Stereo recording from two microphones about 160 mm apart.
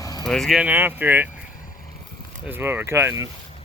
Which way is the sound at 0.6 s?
10° right (ahead or behind).